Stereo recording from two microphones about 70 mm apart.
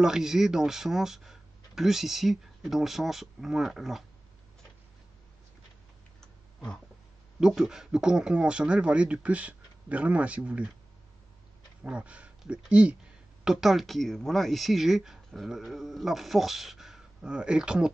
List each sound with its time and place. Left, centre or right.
0.0 s speech: centre
6.2 s a sound: centre
7.3 s a man's voice: centre
11.8 s speech: centre